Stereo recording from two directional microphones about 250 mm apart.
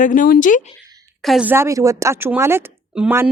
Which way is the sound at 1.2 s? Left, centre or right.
Centre.